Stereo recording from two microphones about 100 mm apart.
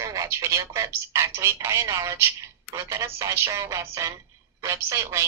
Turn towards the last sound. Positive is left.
turn(degrees=-30)  # may be behind; listen again after turning